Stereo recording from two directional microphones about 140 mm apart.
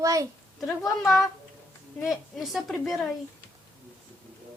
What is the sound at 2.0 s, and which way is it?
A woman's voice, centre (ahead or behind).